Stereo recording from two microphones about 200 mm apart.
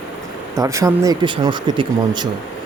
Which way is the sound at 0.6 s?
15° right (ahead or behind).